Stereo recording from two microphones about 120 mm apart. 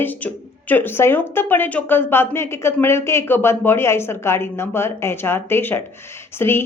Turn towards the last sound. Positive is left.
turn(degrees=20)  # may be behind; listen again after turning